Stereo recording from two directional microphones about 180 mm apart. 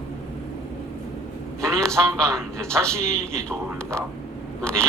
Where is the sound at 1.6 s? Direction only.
5° left (ahead or behind).